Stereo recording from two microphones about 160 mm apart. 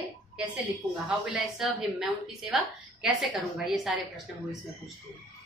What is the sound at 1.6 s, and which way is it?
A woman's voice, 5° right (ahead or behind).